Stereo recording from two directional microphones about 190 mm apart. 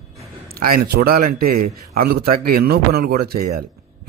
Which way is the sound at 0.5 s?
55° right (ahead or behind).